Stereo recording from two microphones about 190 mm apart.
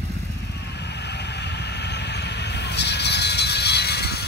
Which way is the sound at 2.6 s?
60° left (ahead or behind).